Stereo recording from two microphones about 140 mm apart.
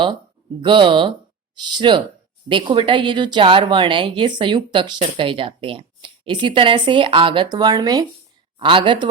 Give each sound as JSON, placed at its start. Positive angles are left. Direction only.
{"t": 0.6, "sound": "speech", "side_deg": -35}